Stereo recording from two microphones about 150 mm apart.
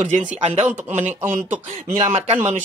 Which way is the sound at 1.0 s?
15° right (ahead or behind).